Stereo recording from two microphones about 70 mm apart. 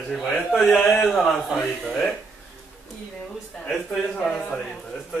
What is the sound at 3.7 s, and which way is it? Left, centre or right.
Speech, centre.